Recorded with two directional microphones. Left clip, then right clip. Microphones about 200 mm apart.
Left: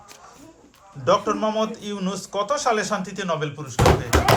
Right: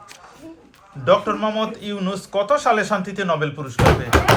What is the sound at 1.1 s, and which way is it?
Speech, 15° left (ahead or behind).